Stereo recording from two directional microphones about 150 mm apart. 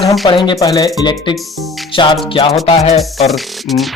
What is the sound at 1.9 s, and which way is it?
Speech, 30° left (ahead or behind).